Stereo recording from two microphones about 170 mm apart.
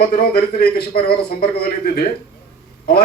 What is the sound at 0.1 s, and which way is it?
A man's voice, 60° left (ahead or behind).